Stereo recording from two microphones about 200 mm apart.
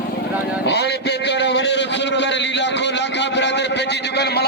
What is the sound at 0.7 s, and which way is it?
A man's voice, 60° left (ahead or behind).